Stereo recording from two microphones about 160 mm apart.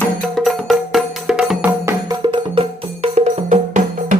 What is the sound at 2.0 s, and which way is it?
Music, 25° right (ahead or behind).